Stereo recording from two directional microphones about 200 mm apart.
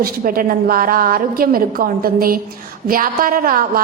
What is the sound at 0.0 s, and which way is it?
A woman's voice, 45° right (ahead or behind).